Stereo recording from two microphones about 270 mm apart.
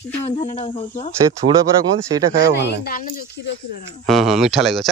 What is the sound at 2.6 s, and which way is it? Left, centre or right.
Speech, left.